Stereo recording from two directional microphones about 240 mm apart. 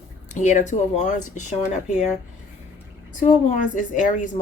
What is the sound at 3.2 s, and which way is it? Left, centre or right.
Speech, left.